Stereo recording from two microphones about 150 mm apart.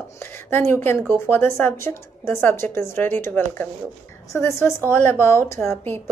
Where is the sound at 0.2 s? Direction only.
15° left (ahead or behind).